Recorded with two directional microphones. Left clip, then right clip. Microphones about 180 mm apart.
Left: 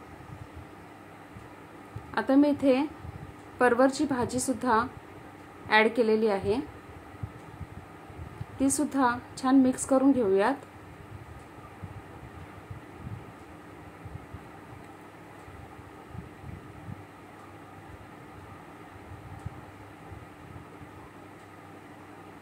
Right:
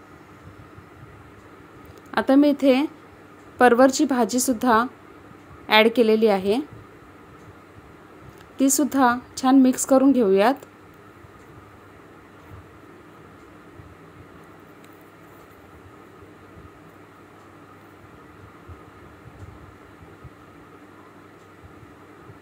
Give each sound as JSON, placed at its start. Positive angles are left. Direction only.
{"t": 2.0, "sound": "speech", "side_deg": -45}
{"t": 8.5, "sound": "speech", "side_deg": -40}